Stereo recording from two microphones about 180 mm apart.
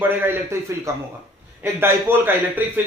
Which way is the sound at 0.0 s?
10° right (ahead or behind).